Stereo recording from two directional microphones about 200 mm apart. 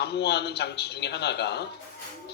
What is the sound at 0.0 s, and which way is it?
A man's voice, 55° left (ahead or behind).